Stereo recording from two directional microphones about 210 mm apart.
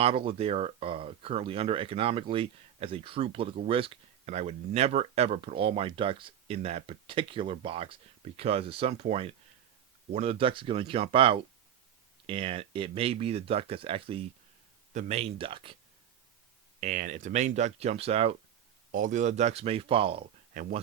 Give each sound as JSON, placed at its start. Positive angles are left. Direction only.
{"t": 0.0, "sound": "speech", "side_deg": -25}
{"t": 16.8, "sound": "speech", "side_deg": -40}
{"t": 18.9, "sound": "speech", "side_deg": -40}